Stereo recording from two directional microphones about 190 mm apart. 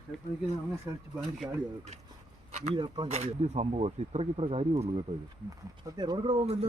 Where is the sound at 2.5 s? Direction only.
35° right (ahead or behind).